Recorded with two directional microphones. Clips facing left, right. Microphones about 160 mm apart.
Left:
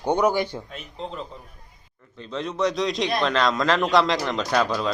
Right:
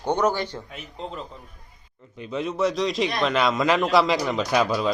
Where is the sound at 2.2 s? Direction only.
10° right (ahead or behind).